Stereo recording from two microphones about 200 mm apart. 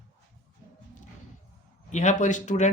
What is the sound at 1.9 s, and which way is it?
Speech, 35° left (ahead or behind).